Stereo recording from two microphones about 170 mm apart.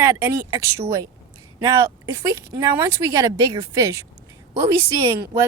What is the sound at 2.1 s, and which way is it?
Speech, 20° right (ahead or behind).